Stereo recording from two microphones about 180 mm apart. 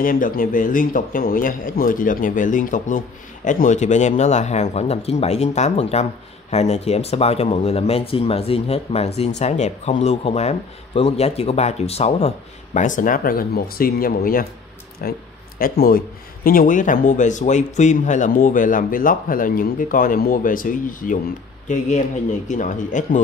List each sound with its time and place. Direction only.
0.0 s speech: 50° left (ahead or behind)